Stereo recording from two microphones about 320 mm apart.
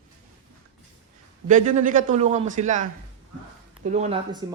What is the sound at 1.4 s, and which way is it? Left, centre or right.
A man's voice, right.